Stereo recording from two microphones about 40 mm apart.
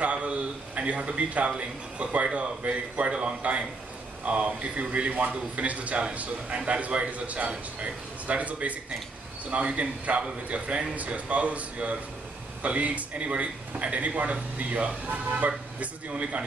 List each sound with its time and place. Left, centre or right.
0.0 s a man's voice: right
4.4 s a man's voice: right